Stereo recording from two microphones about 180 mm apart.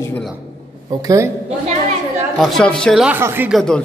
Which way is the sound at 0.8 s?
20° right (ahead or behind).